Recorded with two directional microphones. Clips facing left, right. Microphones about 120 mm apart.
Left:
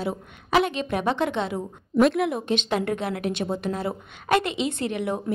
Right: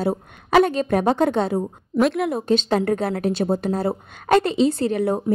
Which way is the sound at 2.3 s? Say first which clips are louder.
Right 5 dB; 35° right (ahead or behind).